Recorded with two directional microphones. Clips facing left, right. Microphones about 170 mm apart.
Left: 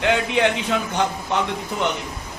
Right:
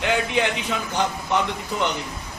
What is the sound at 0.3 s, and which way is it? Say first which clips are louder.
A man's voice: left 3 dB; 15° left (ahead or behind).